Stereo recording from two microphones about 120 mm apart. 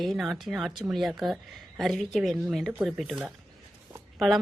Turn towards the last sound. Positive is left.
turn(degrees=0)  # may be behind; listen again after turning